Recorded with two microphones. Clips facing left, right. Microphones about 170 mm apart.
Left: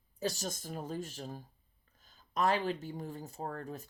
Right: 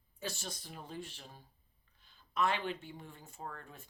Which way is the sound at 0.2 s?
40° left (ahead or behind).